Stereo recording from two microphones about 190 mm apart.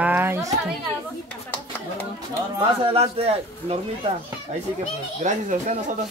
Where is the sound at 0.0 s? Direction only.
10° right (ahead or behind).